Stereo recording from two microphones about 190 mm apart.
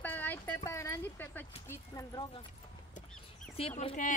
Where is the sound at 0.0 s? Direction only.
10° left (ahead or behind).